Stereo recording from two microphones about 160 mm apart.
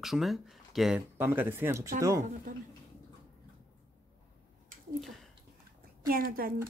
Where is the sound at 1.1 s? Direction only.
15° right (ahead or behind).